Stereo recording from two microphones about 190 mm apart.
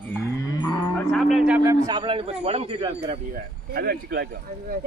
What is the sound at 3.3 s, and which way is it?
Speech, 55° right (ahead or behind).